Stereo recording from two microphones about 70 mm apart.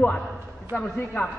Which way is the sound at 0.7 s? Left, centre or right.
Left.